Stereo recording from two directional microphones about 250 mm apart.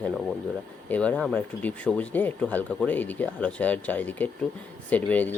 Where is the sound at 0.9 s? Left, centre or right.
Centre.